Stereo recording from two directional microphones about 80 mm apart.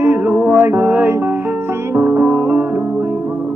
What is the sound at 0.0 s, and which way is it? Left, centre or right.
Music, right.